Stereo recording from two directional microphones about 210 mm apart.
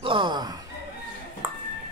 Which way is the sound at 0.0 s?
25° right (ahead or behind).